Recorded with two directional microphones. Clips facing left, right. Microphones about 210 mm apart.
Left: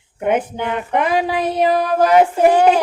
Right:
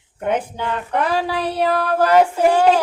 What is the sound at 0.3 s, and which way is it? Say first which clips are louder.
Speech: left 3 dB; 10° left (ahead or behind).